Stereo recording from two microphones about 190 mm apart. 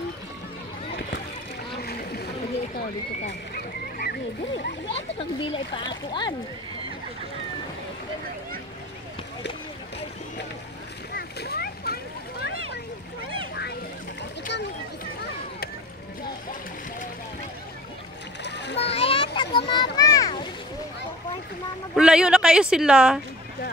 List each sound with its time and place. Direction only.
1.8 s boat: 55° left (ahead or behind)
3.5 s splash: 55° left (ahead or behind)
4.9 s speech: 25° left (ahead or behind)
11.1 s splash: 55° left (ahead or behind)
18.4 s splash: 65° left (ahead or behind)
18.8 s a sound: 35° left (ahead or behind)
21.9 s speech: 5° right (ahead or behind)